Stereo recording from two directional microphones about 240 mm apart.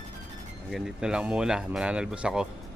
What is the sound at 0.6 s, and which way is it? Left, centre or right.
Speech, centre.